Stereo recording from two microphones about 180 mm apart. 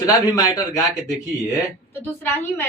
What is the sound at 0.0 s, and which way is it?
Speech, 20° left (ahead or behind).